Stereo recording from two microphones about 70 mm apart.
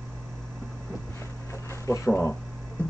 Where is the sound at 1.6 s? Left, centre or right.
Left.